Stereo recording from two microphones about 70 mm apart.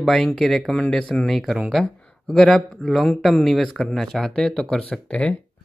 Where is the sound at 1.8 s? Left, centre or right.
Centre.